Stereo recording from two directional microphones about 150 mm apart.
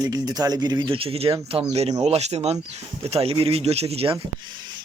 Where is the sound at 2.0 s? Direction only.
45° right (ahead or behind).